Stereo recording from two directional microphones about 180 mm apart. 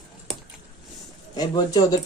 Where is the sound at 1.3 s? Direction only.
20° left (ahead or behind).